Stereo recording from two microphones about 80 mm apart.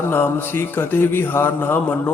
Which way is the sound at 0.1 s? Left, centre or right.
Left.